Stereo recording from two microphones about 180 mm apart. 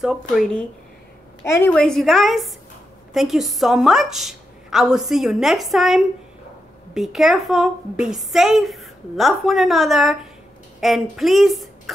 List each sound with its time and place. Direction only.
0.0 s a woman's voice: centre (ahead or behind)
1.4 s a woman's voice: 10° left (ahead or behind)